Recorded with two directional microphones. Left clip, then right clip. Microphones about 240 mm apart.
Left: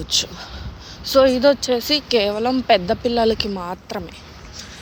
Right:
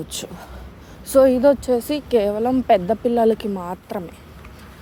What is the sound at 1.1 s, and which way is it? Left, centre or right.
Speech, right.